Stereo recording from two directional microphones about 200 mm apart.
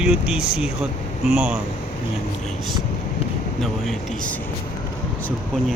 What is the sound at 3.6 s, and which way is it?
Speech, centre (ahead or behind).